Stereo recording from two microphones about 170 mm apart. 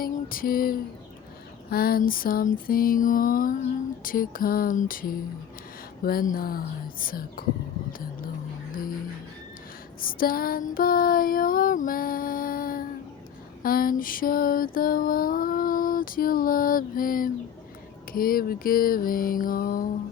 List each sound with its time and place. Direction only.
0.0 s a sound: 55° left (ahead or behind)
1.7 s mantra: 60° left (ahead or behind)
10.0 s mantra: 55° left (ahead or behind)